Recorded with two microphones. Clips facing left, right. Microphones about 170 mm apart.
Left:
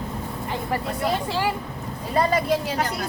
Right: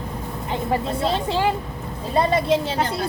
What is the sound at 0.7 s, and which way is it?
Speech, 25° right (ahead or behind).